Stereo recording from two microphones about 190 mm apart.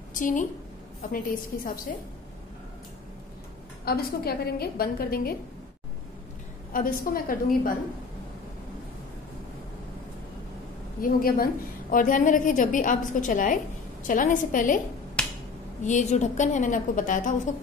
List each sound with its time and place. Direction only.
0.1 s a woman's voice: 45° left (ahead or behind)
3.8 s a woman's voice: 55° left (ahead or behind)
6.7 s a woman's voice: 50° left (ahead or behind)
11.0 s a woman's voice: 50° left (ahead or behind)
15.2 s finger snapping: 5° left (ahead or behind)
15.8 s a woman's voice: 40° left (ahead or behind)